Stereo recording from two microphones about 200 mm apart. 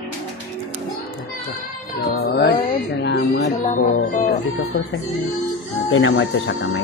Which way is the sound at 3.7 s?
40° left (ahead or behind).